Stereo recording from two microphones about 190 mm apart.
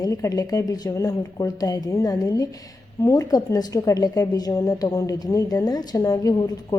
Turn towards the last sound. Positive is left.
turn(degrees=20)  # may be behind; listen again after turning